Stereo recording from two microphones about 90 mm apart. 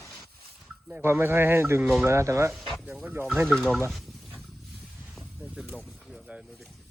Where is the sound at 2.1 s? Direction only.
30° right (ahead or behind).